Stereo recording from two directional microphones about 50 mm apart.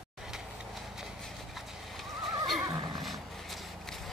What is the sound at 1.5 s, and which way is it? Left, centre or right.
Horse, centre.